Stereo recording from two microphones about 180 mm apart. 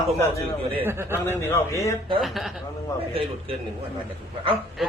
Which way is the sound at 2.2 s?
Centre (ahead or behind).